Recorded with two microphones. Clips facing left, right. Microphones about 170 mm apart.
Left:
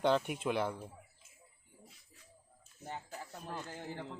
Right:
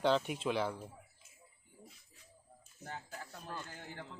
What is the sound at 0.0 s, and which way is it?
Speech, 10° left (ahead or behind).